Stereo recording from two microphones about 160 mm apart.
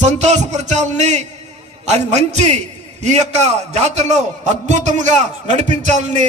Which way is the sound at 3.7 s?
45° right (ahead or behind).